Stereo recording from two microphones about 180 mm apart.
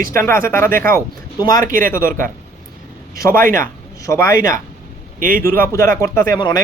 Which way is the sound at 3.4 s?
50° right (ahead or behind).